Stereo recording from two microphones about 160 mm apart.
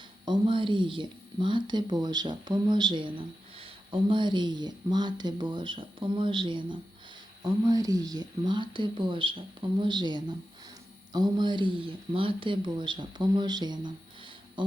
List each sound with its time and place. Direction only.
0.3 s speech: 30° right (ahead or behind)